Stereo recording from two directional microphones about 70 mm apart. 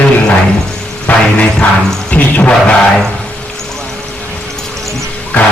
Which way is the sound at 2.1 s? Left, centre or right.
Left.